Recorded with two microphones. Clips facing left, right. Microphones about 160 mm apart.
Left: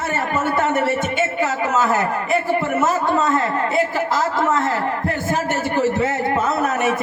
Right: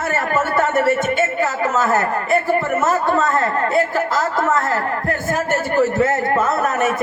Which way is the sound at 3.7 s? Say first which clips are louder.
Right 2 dB; 45° right (ahead or behind).